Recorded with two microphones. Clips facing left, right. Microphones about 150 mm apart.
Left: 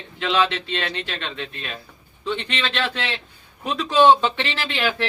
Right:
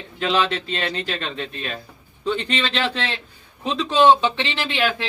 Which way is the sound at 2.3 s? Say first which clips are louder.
Right 2 dB; 35° right (ahead or behind).